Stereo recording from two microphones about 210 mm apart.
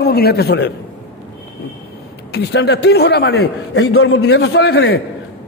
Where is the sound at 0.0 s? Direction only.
50° left (ahead or behind).